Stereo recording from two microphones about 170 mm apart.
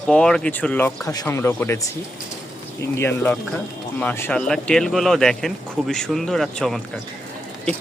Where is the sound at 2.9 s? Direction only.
15° left (ahead or behind).